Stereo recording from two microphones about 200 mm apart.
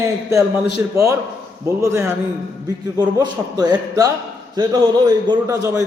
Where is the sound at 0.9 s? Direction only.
15° right (ahead or behind).